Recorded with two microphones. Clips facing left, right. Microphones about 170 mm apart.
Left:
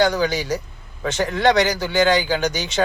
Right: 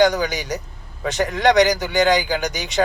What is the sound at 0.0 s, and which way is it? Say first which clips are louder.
A man's voice: right 1 dB; 15° right (ahead or behind).